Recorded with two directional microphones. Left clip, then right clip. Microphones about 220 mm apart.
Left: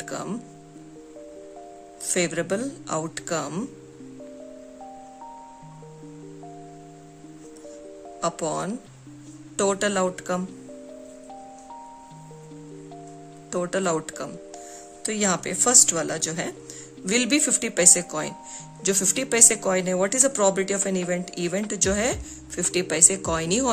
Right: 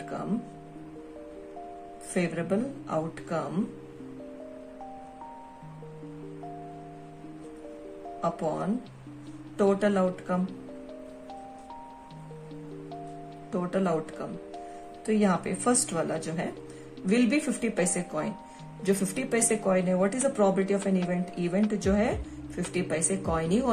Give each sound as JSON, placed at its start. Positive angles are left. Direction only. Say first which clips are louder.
{"t": 2.1, "sound": "speech", "louder": "left 4 dB", "side_deg": 50}
{"t": 8.2, "sound": "music", "louder": "left 3 dB", "side_deg": 45}
{"t": 9.6, "sound": "speech", "louder": "left 2 dB", "side_deg": 45}
{"t": 13.5, "sound": "speech", "louder": "left 4 dB", "side_deg": 45}
{"t": 15.0, "sound": "speech", "louder": "left 1 dB", "side_deg": 45}